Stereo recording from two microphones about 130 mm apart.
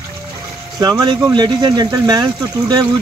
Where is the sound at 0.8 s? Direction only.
30° right (ahead or behind).